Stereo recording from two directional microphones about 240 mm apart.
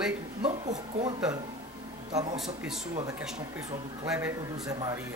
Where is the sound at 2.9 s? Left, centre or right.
Centre.